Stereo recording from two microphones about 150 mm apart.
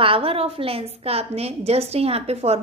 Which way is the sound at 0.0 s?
40° right (ahead or behind).